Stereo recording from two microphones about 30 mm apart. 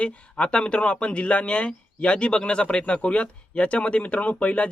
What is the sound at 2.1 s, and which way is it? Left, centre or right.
Speech, left.